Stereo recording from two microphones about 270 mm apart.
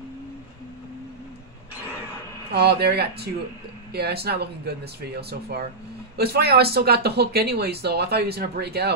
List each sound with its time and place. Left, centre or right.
2.5 s speech: right